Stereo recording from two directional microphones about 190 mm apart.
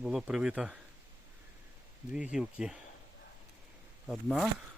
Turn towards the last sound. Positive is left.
turn(degrees=0)  # may be behind; listen again after turning